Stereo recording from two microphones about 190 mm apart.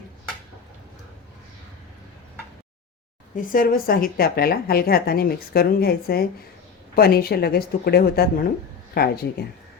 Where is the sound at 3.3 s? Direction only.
45° left (ahead or behind).